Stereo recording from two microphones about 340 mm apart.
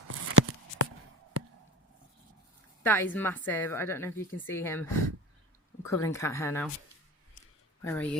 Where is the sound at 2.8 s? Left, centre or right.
Centre.